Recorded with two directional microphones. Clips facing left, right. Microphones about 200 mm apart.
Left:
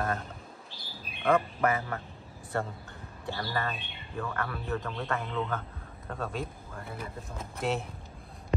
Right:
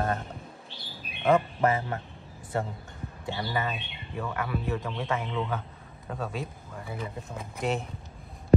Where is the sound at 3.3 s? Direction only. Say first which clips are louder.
Right 2 dB; 15° right (ahead or behind).